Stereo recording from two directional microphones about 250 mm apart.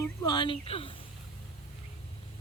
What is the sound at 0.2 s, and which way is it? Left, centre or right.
Speech, centre.